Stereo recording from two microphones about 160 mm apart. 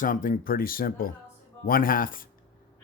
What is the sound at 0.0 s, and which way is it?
Speech, 60° left (ahead or behind).